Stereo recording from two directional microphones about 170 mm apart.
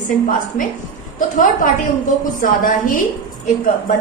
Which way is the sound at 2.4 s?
50° left (ahead or behind).